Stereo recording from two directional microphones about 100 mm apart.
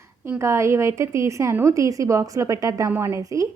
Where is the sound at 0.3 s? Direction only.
30° right (ahead or behind).